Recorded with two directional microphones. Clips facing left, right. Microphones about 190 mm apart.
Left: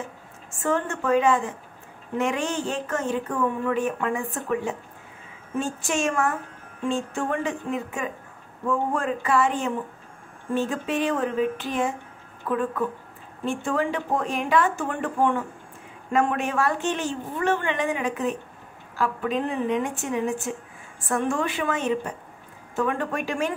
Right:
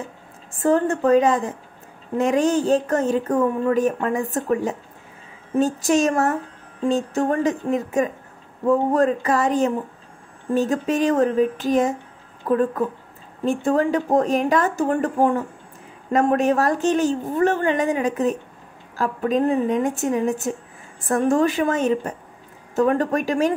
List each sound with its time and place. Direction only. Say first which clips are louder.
0.5 s speech: right 7 dB; 35° right (ahead or behind)